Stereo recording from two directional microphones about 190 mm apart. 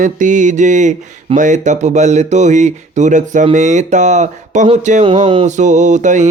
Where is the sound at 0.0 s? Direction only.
40° right (ahead or behind).